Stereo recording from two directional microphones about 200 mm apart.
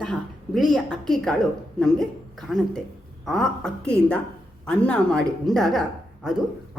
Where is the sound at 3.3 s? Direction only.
5° left (ahead or behind).